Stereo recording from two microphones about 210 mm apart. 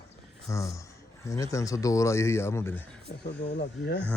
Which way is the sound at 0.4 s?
15° left (ahead or behind).